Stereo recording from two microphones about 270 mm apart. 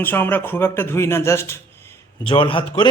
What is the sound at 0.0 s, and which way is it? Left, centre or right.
Speech, centre.